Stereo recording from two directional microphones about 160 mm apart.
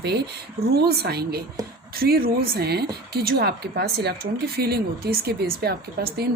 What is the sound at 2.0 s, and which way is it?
A woman's voice, 70° right (ahead or behind).